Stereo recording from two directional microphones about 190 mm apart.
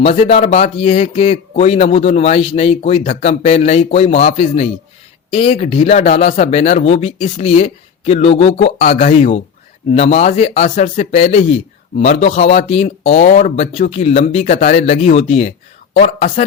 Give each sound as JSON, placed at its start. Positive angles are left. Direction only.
{"t": 0.0, "sound": "speech", "side_deg": 30}